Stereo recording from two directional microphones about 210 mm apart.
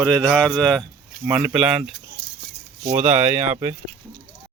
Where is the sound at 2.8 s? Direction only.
35° right (ahead or behind).